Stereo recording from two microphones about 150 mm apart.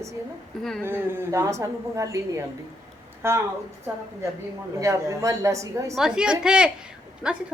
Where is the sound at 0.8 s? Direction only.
15° right (ahead or behind).